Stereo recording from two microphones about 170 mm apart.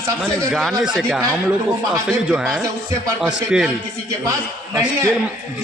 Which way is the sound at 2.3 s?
Centre (ahead or behind).